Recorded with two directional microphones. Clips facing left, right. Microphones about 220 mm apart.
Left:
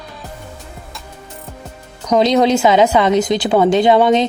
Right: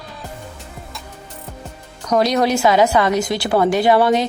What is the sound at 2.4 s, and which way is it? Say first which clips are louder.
Speech: left 3 dB; 20° left (ahead or behind).